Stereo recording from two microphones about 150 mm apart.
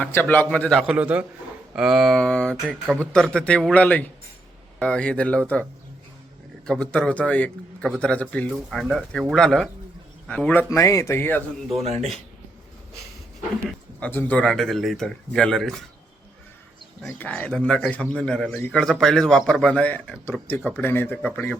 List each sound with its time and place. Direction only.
0.0 s a man's voice: 10° left (ahead or behind)
6.7 s a man's voice: 5° left (ahead or behind)
11.8 s speech: 45° right (ahead or behind)
14.0 s speech: 10° left (ahead or behind)
17.2 s a man's voice: 10° left (ahead or behind)